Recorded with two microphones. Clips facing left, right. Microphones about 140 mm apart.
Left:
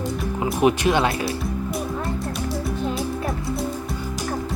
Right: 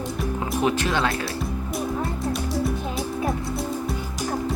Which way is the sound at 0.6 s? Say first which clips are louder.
Left 5 dB; 15° left (ahead or behind).